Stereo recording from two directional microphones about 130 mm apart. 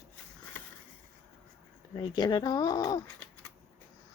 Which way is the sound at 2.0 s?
35° left (ahead or behind).